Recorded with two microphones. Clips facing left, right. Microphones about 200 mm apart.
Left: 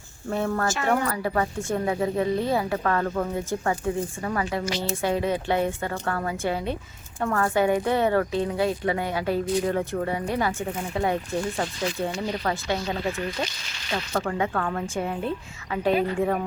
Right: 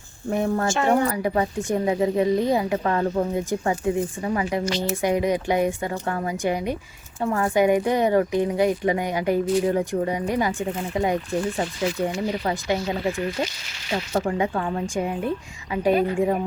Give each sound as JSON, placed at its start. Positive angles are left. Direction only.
{"t": 0.3, "sound": "speech", "side_deg": -15}
{"t": 0.7, "sound": "speech", "side_deg": -30}
{"t": 1.0, "sound": "speech", "side_deg": -15}